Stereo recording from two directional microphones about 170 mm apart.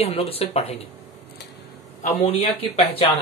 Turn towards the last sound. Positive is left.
turn(degrees=35)  # may be behind; listen again after turning